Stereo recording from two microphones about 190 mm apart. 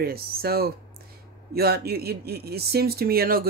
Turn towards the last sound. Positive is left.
turn(degrees=-50)  # may be behind; listen again after turning